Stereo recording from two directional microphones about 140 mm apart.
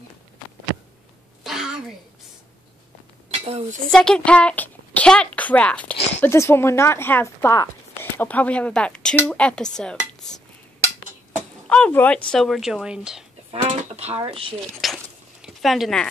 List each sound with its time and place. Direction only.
1.4 s a sound: 5° right (ahead or behind)
3.3 s speech: 50° right (ahead or behind)
3.9 s a child's voice: 5° left (ahead or behind)
11.7 s speech: 10° left (ahead or behind); by 13.2 s 5° right (ahead or behind)
13.5 s speech: 45° right (ahead or behind)
14.8 s a sound: centre (ahead or behind)
15.4 s speech: centre (ahead or behind)